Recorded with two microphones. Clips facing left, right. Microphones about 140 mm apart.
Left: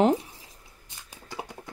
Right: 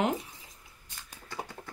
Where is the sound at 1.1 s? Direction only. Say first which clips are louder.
Left 2 dB; 15° left (ahead or behind).